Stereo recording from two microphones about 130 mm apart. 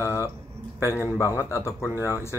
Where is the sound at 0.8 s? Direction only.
20° left (ahead or behind).